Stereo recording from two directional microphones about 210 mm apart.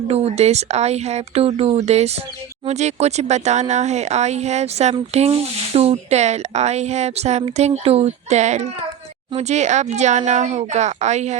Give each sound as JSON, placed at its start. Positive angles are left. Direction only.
{"t": 0.1, "sound": "speech", "side_deg": -30}